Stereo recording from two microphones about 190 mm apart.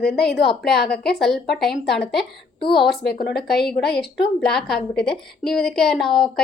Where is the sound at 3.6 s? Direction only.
55° left (ahead or behind).